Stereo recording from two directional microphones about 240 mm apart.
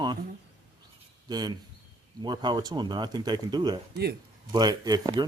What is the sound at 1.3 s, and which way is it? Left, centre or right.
A man's voice, centre.